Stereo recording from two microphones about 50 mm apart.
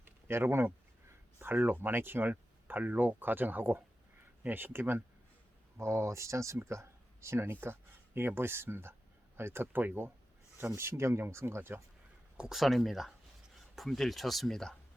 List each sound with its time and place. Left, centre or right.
0.3 s speech: right
1.4 s speech: right
5.7 s speech: right
6.7 s a sound: right
7.4 s speech: right
12.5 s speech: centre